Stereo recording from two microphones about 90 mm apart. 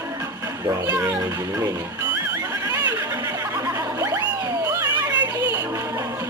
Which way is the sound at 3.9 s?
35° right (ahead or behind).